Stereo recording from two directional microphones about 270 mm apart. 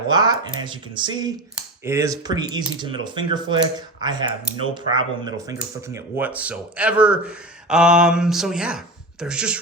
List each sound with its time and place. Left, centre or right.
0.1 s speech: centre